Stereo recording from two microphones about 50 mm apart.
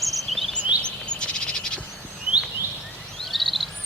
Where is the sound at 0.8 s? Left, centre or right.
Centre.